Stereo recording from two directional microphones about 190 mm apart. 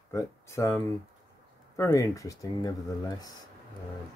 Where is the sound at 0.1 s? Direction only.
15° left (ahead or behind).